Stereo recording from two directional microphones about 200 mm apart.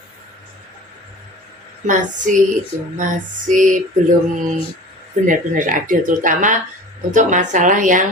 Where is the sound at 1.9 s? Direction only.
40° right (ahead or behind).